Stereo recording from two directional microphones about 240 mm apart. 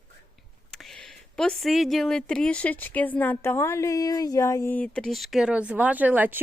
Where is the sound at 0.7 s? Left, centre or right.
Centre.